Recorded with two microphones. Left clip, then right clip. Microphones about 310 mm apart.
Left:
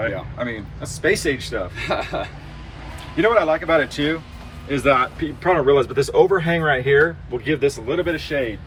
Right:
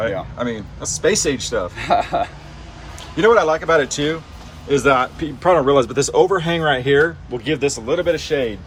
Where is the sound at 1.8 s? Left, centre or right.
Right.